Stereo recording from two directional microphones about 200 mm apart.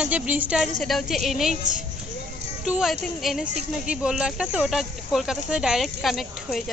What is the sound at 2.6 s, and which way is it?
Speech, 5° right (ahead or behind).